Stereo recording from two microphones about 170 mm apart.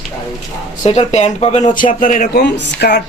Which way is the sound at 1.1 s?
40° left (ahead or behind).